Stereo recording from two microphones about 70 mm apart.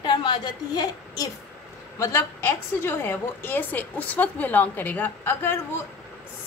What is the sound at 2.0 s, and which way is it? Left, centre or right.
A woman's voice, left.